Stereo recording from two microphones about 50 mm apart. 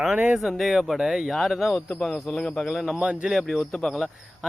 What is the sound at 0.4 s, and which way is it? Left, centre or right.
Speech, centre.